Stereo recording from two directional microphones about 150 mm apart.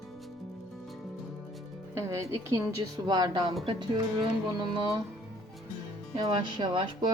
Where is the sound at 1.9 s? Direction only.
20° right (ahead or behind).